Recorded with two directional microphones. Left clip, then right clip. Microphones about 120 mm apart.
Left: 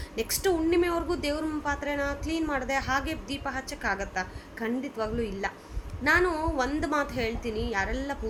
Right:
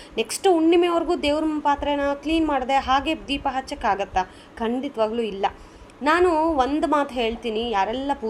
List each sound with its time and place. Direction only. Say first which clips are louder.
0.2 s a woman's voice: right 8 dB; 35° right (ahead or behind)